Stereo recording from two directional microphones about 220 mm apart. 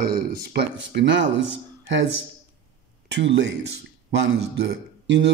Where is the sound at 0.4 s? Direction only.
50° right (ahead or behind).